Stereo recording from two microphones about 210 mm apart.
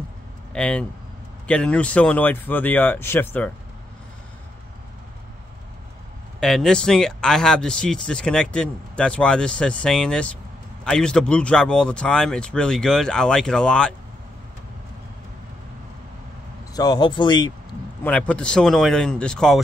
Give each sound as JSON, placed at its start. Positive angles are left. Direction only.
{"t": 0.5, "sound": "speech", "side_deg": 5}
{"t": 6.4, "sound": "speech", "side_deg": 0}
{"t": 16.7, "sound": "a man's voice", "side_deg": 20}
{"t": 18.0, "sound": "speech", "side_deg": 5}